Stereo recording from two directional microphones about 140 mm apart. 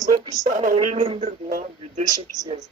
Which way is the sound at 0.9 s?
45° right (ahead or behind).